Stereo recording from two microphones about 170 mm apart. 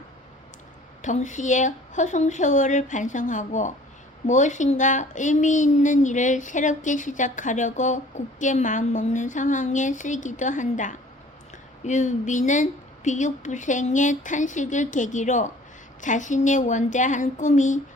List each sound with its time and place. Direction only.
1.0 s speech: 45° left (ahead or behind)